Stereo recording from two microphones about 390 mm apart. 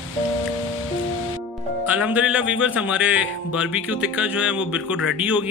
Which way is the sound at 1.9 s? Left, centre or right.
Centre.